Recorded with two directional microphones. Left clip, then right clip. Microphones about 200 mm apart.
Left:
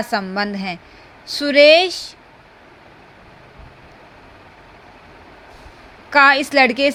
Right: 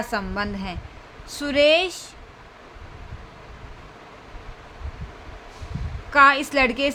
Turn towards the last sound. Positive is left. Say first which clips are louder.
# left 6 dB
turn(degrees=25)  # may be behind; listen again after turning